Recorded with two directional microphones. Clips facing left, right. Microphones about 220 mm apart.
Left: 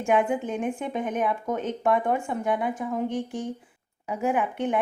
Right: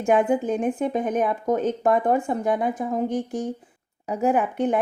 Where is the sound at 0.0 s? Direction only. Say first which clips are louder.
Right 4 dB; 40° right (ahead or behind).